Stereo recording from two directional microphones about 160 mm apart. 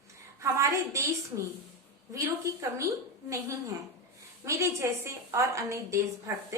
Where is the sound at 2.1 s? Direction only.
20° right (ahead or behind).